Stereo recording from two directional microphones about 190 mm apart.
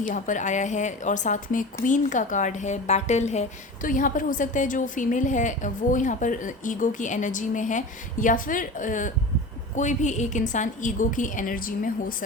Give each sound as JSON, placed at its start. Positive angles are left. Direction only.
{"t": 0.0, "sound": "a woman's voice", "side_deg": 40}